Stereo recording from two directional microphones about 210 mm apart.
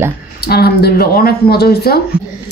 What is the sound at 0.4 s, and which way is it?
Speech, 50° left (ahead or behind).